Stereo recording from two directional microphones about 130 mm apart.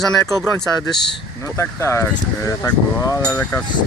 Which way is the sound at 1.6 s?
20° left (ahead or behind).